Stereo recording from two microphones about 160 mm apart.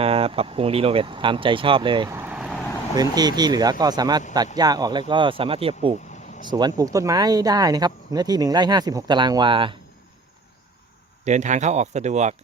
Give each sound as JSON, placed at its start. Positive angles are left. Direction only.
{"t": 0.0, "sound": "speech", "side_deg": -35}
{"t": 2.0, "sound": "vehicle", "side_deg": -15}
{"t": 2.9, "sound": "speech", "side_deg": -25}
{"t": 11.3, "sound": "speech", "side_deg": -50}